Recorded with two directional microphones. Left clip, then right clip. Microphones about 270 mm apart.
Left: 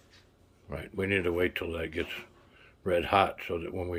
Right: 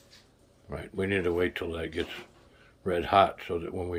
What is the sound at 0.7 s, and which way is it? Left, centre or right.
Speech, centre.